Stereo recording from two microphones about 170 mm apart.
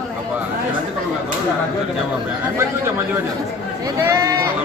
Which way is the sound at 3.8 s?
20° right (ahead or behind).